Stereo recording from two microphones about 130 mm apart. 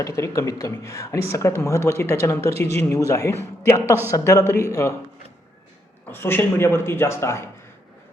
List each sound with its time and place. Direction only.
0.0 s a man's voice: 20° left (ahead or behind)
2.6 s speech: 55° right (ahead or behind)
3.1 s a man's voice: 25° left (ahead or behind)
6.1 s a man's voice: 15° left (ahead or behind)